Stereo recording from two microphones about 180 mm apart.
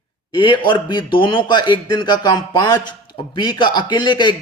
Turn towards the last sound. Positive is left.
turn(degrees=25)  # may be behind; listen again after turning